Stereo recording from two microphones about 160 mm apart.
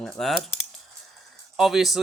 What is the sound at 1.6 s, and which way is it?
Speech, centre (ahead or behind).